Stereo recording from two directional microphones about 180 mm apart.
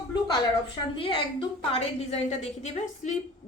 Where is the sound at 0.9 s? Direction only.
30° left (ahead or behind).